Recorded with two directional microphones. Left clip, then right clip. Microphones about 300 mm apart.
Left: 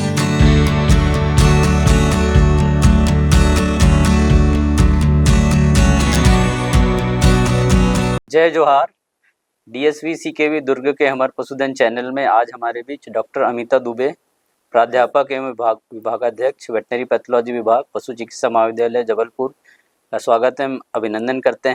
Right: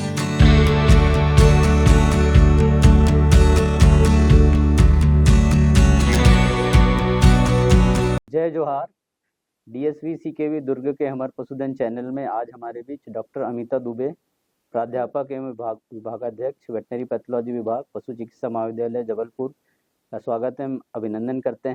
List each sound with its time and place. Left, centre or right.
0.0 s music: centre
9.7 s speech: centre